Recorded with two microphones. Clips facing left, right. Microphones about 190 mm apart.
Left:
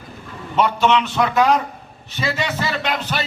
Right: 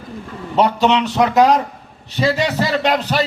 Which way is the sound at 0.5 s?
35° right (ahead or behind).